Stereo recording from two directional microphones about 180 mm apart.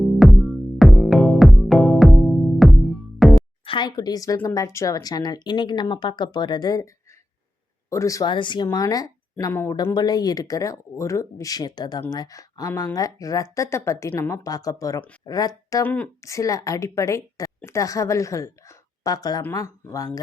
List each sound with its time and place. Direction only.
0.0 s music: centre (ahead or behind)
3.6 s speech: 25° left (ahead or behind)